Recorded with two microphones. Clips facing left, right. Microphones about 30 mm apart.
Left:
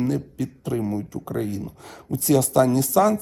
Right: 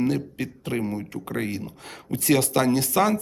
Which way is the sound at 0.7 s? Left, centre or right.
Right.